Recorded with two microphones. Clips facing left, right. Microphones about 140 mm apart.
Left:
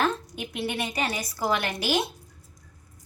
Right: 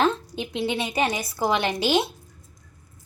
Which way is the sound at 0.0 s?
25° right (ahead or behind).